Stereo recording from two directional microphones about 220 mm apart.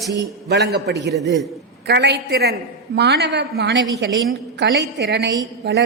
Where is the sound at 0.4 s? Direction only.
45° right (ahead or behind).